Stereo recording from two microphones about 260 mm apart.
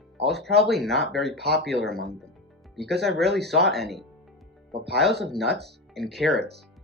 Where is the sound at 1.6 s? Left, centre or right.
Centre.